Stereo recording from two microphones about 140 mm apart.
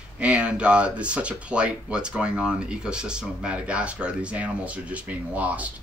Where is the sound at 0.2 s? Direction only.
10° right (ahead or behind).